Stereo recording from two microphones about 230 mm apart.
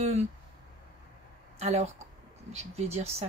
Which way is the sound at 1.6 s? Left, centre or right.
Right.